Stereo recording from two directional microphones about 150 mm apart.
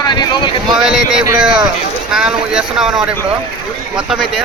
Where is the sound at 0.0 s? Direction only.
30° left (ahead or behind).